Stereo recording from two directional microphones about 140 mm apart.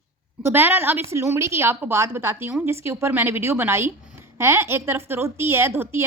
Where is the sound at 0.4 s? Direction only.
15° right (ahead or behind).